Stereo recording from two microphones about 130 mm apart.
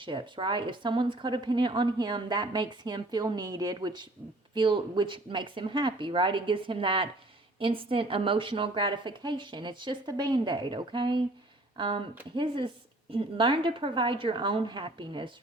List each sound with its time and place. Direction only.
0.0 s speech: 40° right (ahead or behind)